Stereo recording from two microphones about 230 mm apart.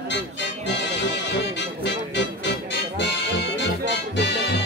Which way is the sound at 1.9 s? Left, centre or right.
Left.